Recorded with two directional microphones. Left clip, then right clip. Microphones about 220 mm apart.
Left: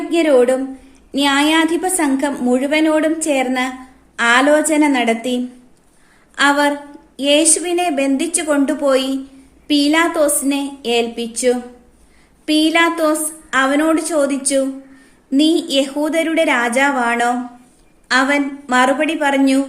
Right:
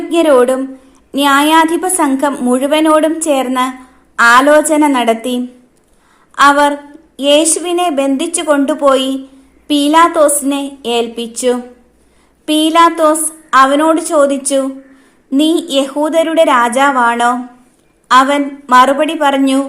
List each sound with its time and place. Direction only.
0.1 s a woman's voice: 20° right (ahead or behind)